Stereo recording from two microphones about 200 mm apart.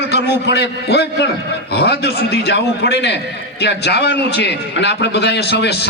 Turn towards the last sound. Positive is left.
turn(degrees=55)  # may be behind; listen again after turning